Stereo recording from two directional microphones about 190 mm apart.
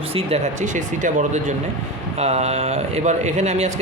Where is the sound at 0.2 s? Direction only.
35° right (ahead or behind).